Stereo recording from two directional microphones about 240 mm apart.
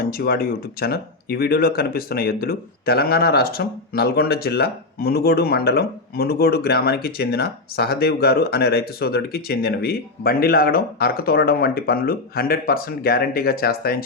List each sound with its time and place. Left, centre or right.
0.0 s speech: left